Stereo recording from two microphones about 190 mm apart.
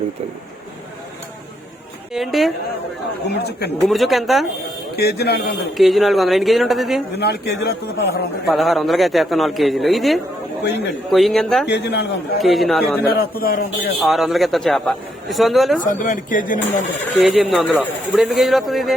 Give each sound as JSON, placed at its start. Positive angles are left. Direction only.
{"t": 2.1, "sound": "a man's voice", "side_deg": 0}
{"t": 3.2, "sound": "a man's voice", "side_deg": 60}
{"t": 3.8, "sound": "a man's voice", "side_deg": 0}
{"t": 4.9, "sound": "a man's voice", "side_deg": 55}
{"t": 5.7, "sound": "a man's voice", "side_deg": 0}
{"t": 7.2, "sound": "a man's voice", "side_deg": 60}
{"t": 8.5, "sound": "a man's voice", "side_deg": 0}
{"t": 11.7, "sound": "a man's voice", "side_deg": 60}
{"t": 12.4, "sound": "a man's voice", "side_deg": 0}
{"t": 13.1, "sound": "a man's voice", "side_deg": 55}
{"t": 14.0, "sound": "a man's voice", "side_deg": 0}
{"t": 15.8, "sound": "a man's voice", "side_deg": 45}
{"t": 17.2, "sound": "a man's voice", "side_deg": 0}